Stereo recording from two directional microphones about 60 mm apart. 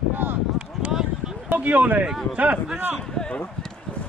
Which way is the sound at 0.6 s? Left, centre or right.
Centre.